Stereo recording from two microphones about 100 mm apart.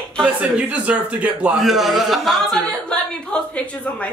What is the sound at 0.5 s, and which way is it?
Speech, 15° right (ahead or behind).